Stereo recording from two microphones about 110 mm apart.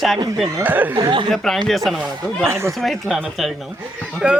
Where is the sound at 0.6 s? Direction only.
15° right (ahead or behind).